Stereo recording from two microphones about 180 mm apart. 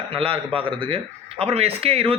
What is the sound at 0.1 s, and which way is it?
Speech, 30° right (ahead or behind).